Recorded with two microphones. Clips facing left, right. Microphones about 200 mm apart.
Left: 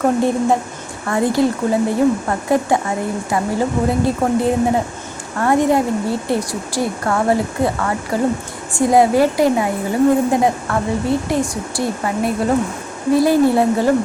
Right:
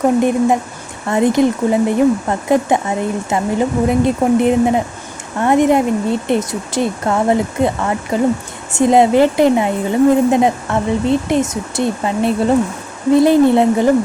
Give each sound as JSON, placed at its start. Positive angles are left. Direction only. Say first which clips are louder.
{"t": 0.0, "sound": "a woman's voice", "louder": "right 3 dB", "side_deg": -15}